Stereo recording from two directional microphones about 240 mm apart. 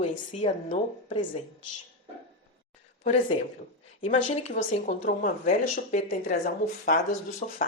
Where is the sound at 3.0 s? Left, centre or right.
Left.